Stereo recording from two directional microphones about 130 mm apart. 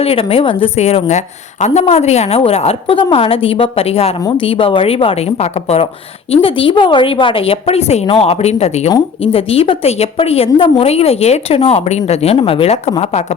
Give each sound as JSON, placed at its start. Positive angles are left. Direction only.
{"t": 0.0, "sound": "a woman's voice", "side_deg": 50}